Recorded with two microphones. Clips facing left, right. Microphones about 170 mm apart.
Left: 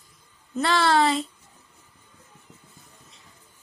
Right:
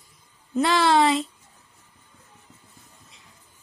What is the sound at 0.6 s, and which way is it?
Speech, 10° right (ahead or behind).